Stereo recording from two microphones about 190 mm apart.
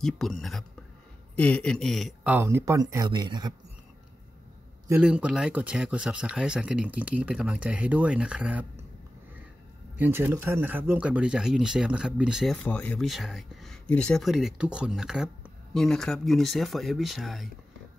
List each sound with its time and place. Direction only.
0.0 s speech: centre (ahead or behind)
2.3 s speech: 15° right (ahead or behind)
5.0 s speech: 5° right (ahead or behind)
9.9 s speech: 10° right (ahead or behind)
12.6 s speech: 10° left (ahead or behind)